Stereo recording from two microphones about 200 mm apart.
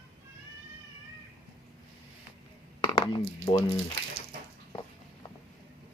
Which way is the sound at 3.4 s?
15° left (ahead or behind).